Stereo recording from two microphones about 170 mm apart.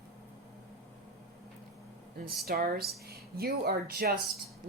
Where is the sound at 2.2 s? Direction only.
60° right (ahead or behind).